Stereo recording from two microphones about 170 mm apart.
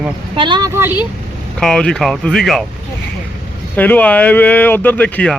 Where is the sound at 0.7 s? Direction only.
15° right (ahead or behind).